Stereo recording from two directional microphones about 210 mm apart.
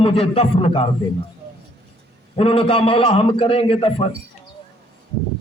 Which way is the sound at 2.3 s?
25° left (ahead or behind).